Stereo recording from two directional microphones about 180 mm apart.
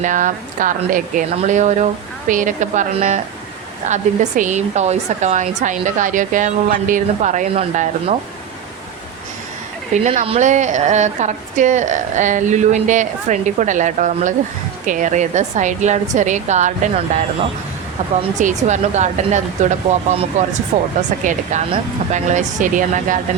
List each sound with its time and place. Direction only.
0.0 s a woman's voice: 45° right (ahead or behind)
9.9 s a woman's voice: 40° right (ahead or behind)
18.2 s a woman's voice: 40° right (ahead or behind)